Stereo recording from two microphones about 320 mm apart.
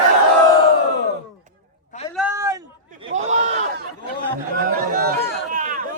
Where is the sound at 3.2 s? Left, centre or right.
Right.